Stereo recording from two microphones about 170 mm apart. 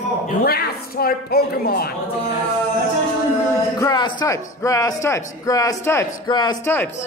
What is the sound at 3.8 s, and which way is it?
A man's voice, 25° left (ahead or behind).